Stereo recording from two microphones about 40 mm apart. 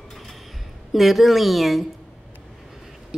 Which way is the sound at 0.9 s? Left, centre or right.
Centre.